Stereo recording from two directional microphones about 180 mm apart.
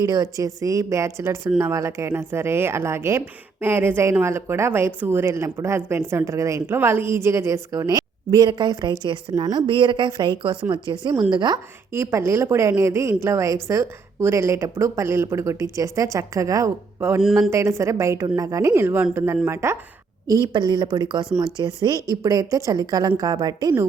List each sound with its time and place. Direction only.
0.0 s a woman's voice: 20° right (ahead or behind)
20.5 s a woman's voice: 25° right (ahead or behind)